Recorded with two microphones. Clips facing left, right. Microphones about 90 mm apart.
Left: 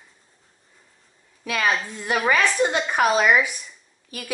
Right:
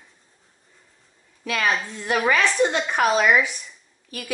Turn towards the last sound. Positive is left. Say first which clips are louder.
# right 1 dB
turn(degrees=5)  # may be behind; listen again after turning